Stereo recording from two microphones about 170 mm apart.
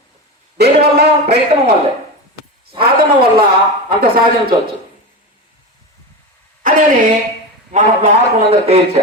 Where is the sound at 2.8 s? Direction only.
65° right (ahead or behind).